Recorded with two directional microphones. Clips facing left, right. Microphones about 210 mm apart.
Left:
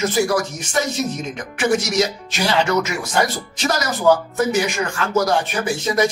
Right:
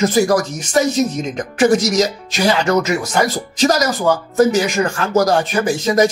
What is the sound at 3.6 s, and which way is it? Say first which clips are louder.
Speech: right 7 dB; 40° right (ahead or behind).